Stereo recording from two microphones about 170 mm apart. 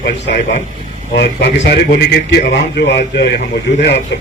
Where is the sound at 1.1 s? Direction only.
90° left.